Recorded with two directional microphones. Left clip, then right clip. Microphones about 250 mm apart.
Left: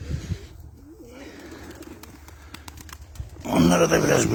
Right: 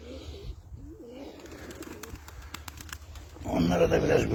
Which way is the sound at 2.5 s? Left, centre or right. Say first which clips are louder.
Even; centre.